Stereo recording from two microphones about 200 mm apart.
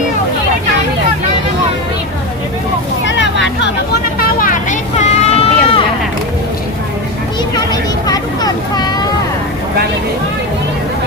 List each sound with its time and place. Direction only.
3.0 s vehicle: 65° left (ahead or behind)
4.2 s a sound: 45° left (ahead or behind)
7.5 s vehicle: 20° left (ahead or behind)